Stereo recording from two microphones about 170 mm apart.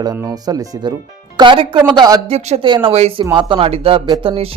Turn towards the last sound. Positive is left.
turn(degrees=-35)  # may be behind; listen again after turning